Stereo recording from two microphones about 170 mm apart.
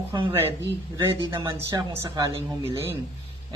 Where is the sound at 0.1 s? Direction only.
30° right (ahead or behind).